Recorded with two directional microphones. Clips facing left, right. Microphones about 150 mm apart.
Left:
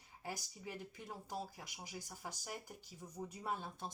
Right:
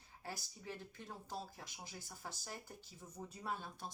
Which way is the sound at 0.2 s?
15° left (ahead or behind).